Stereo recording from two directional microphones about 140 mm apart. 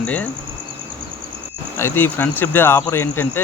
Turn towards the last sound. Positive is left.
turn(degrees=15)  # may be behind; listen again after turning